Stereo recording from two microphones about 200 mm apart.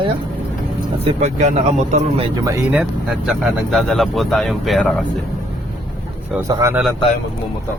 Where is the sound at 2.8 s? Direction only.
5° right (ahead or behind).